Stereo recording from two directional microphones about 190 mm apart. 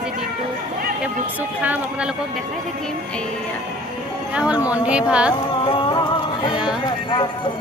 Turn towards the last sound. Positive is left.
turn(degrees=25)  # may be behind; listen again after turning